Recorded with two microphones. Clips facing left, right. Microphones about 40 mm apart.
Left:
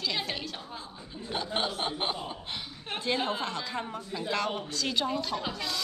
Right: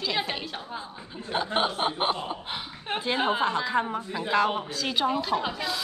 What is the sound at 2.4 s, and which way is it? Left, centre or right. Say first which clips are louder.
A woman's voice: right 4 dB; centre.